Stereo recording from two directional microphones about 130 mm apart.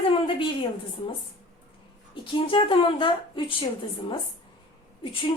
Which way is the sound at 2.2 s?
40° left (ahead or behind).